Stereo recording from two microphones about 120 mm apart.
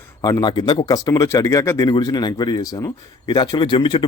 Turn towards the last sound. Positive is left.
turn(degrees=40)  # may be behind; listen again after turning